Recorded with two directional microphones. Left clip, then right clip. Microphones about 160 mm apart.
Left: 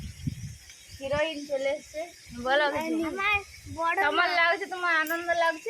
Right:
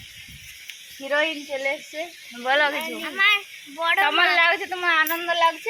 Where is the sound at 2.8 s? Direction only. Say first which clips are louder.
Right 7 dB; 65° left (ahead or behind).